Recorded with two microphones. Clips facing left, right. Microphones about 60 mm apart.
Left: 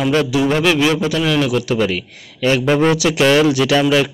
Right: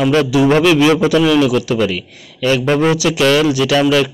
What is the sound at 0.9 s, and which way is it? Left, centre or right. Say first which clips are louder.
Speech: right 6 dB; centre.